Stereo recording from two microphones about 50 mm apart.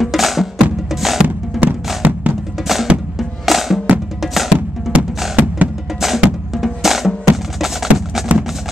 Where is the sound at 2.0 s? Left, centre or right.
Right.